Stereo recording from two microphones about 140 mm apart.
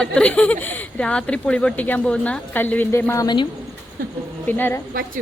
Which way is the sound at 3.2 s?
35° left (ahead or behind).